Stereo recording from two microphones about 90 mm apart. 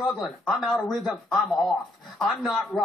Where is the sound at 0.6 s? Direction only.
Centre (ahead or behind).